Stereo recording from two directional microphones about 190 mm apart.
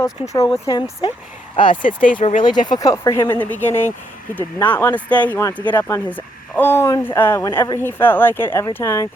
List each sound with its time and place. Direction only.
0.0 s speech: 20° left (ahead or behind)
1.8 s speech: 45° left (ahead or behind)
2.4 s speech: 25° left (ahead or behind)